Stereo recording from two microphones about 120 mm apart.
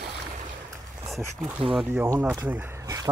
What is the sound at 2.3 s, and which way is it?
Speech, 20° right (ahead or behind).